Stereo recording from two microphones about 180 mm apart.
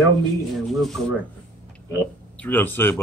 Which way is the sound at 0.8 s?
Centre (ahead or behind).